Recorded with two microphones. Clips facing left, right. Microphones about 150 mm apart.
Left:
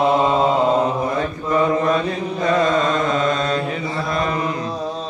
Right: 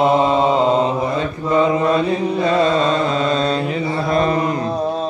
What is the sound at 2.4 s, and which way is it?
Mantra, 30° right (ahead or behind).